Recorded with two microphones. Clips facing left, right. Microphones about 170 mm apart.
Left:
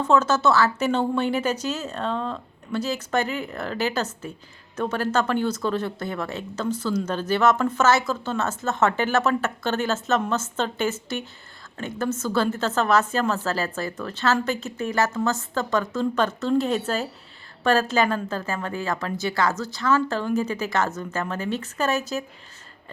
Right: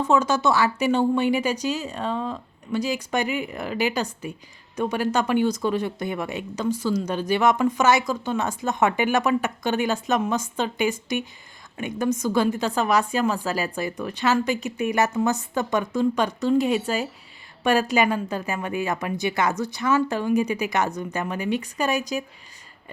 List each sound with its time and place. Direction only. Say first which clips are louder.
0.0 s speech: left 1 dB; 10° right (ahead or behind)